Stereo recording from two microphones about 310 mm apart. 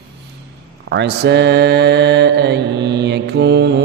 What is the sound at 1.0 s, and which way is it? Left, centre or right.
Mantra, right.